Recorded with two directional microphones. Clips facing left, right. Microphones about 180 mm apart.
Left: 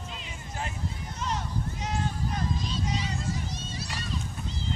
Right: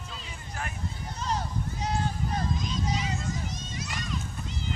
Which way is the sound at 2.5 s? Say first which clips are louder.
Right 1 dB; 30° left (ahead or behind).